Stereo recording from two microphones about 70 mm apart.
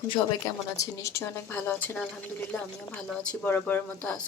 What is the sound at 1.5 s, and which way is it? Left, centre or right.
Speech, left.